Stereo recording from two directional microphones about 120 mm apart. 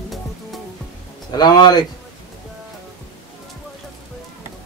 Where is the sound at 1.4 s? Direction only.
35° left (ahead or behind).